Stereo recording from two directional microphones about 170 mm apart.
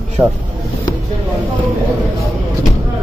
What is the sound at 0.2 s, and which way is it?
Speech, 10° right (ahead or behind).